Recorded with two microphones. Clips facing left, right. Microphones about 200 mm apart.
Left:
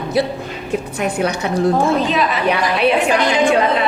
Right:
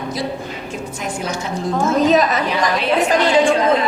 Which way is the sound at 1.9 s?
40° right (ahead or behind).